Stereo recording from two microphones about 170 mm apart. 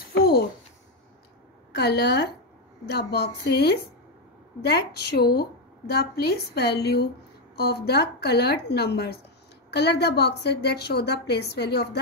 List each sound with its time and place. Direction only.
1.8 s a woman's voice: 75° left (ahead or behind)